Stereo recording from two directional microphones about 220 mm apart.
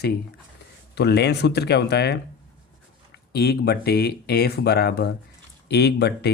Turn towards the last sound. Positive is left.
turn(degrees=50)  # may be behind; listen again after turning